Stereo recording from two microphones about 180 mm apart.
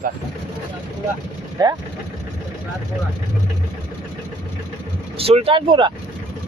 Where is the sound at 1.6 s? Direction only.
25° right (ahead or behind).